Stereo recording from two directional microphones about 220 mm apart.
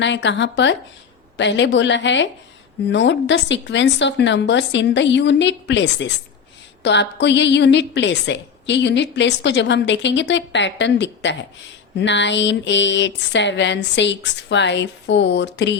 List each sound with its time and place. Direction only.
0.0 s a woman's voice: 55° left (ahead or behind)